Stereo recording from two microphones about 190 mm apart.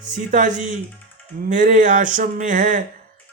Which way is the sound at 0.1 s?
45° right (ahead or behind).